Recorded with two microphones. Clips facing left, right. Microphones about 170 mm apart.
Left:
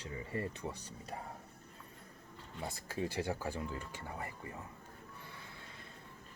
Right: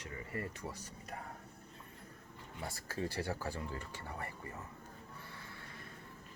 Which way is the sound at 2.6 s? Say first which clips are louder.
Left 1 dB; 20° left (ahead or behind).